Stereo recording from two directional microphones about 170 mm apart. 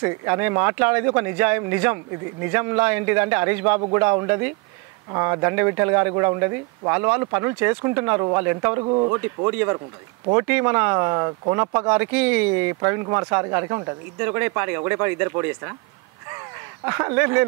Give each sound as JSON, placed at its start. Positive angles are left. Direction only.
{"t": 0.0, "sound": "speech", "side_deg": -15}
{"t": 10.3, "sound": "speech", "side_deg": -15}
{"t": 16.3, "sound": "a sound", "side_deg": -15}